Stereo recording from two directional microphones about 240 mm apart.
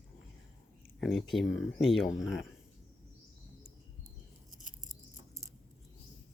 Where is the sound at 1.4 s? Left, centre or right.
Left.